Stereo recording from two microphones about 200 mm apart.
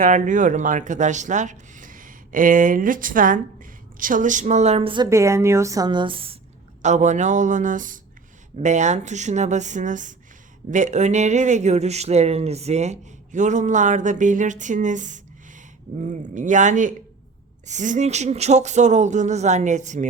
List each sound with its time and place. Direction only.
0.0 s speech: 40° right (ahead or behind)
5.0 s a woman's voice: 15° right (ahead or behind)
6.8 s speech: 35° right (ahead or behind)